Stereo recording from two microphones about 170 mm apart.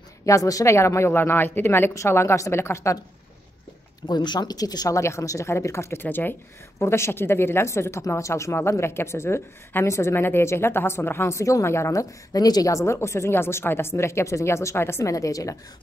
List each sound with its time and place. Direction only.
0.2 s a woman's voice: 20° left (ahead or behind)
4.1 s a woman's voice: 25° left (ahead or behind)